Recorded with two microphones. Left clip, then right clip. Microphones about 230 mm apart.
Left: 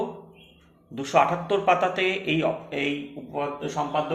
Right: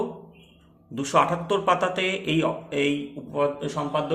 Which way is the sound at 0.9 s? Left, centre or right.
Right.